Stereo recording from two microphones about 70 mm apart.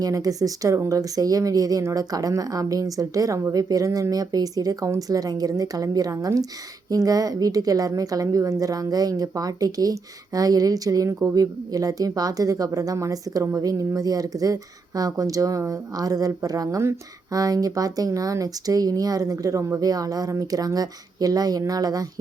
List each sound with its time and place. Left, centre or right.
0.0 s a woman's voice: right